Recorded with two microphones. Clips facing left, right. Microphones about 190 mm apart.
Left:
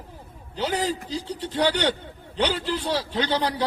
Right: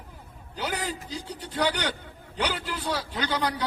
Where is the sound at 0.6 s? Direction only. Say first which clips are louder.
Left 6 dB; 25° left (ahead or behind).